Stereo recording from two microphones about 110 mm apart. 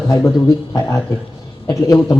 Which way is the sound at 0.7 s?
30° left (ahead or behind).